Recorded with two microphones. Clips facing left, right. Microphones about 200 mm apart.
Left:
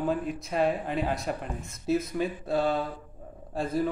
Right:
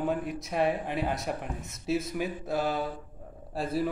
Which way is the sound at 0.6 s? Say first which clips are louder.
Left 1 dB; 65° right (ahead or behind).